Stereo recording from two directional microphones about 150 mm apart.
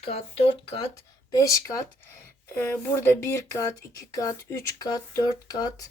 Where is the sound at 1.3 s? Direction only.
25° left (ahead or behind).